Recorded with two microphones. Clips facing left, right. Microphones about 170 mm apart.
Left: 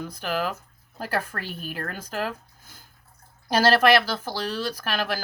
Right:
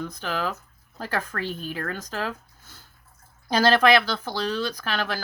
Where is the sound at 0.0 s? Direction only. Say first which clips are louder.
Left 1 dB; 10° left (ahead or behind).